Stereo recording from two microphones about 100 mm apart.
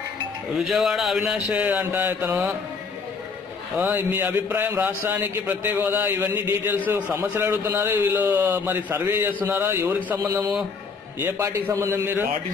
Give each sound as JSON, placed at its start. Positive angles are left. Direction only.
{"t": 0.6, "sound": "speech", "side_deg": -5}
{"t": 1.5, "sound": "mantra", "side_deg": -15}
{"t": 3.7, "sound": "a man's voice", "side_deg": -15}
{"t": 10.1, "sound": "speech", "side_deg": -35}
{"t": 11.1, "sound": "a man's voice", "side_deg": -20}